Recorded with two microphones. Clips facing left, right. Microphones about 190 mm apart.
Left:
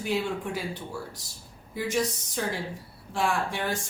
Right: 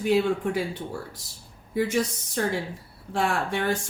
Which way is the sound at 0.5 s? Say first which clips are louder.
Right 4 dB; 55° right (ahead or behind).